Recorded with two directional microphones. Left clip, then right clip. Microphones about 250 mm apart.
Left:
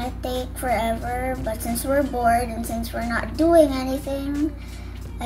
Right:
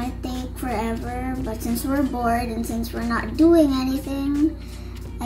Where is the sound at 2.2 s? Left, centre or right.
Right.